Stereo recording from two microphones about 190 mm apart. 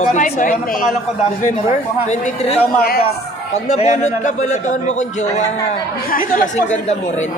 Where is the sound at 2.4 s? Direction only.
30° left (ahead or behind).